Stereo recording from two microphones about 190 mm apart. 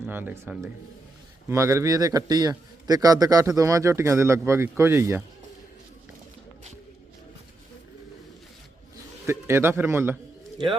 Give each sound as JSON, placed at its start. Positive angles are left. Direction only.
{"t": 0.0, "sound": "a man's voice", "side_deg": -10}
{"t": 9.2, "sound": "a man's voice", "side_deg": -15}